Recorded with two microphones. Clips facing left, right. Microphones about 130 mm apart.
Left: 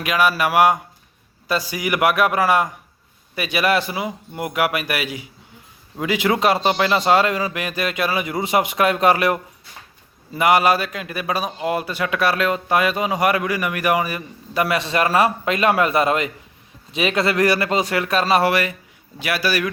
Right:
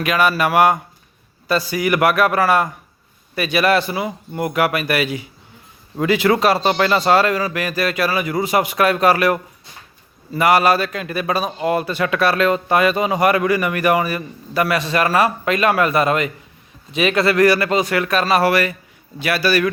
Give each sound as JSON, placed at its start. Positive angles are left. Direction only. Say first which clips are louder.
{"t": 0.0, "sound": "a man's voice", "louder": "right 2 dB", "side_deg": 10}